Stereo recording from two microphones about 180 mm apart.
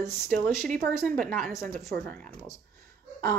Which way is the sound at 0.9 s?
5° left (ahead or behind).